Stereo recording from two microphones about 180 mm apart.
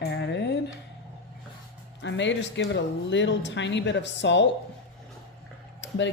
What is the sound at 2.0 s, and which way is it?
Speech, 80° left.